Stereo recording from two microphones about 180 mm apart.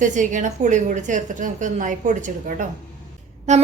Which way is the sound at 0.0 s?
45° right (ahead or behind).